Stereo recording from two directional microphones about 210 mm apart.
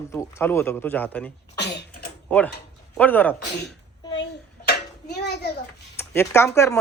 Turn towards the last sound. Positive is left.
turn(degrees=15)  # may be behind; listen again after turning